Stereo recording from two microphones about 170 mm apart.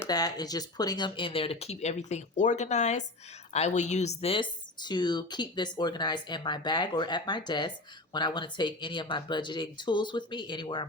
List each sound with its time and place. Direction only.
0.0 s speech: 20° left (ahead or behind)